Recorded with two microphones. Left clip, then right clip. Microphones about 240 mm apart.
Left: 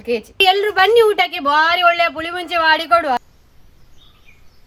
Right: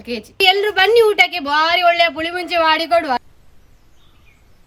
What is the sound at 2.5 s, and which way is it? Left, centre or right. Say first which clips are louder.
Speech: left 1 dB; left.